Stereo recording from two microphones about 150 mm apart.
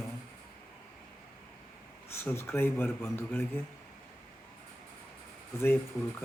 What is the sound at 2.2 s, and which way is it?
Speech, 15° left (ahead or behind).